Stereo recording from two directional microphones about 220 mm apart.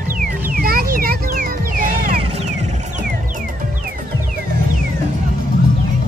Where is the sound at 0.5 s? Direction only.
40° right (ahead or behind).